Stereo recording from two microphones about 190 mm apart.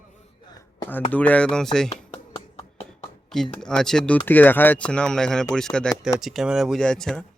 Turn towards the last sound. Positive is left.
turn(degrees=5)  # may be behind; listen again after turning